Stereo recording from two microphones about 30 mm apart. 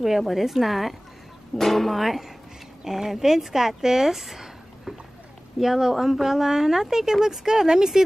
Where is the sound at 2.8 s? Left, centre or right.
Centre.